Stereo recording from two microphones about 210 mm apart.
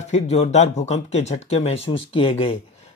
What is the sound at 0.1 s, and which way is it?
Speech, 30° left (ahead or behind).